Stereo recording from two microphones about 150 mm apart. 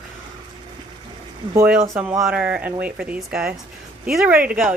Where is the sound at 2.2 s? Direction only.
5° right (ahead or behind).